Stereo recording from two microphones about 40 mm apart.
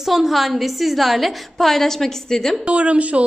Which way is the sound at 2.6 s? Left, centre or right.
Right.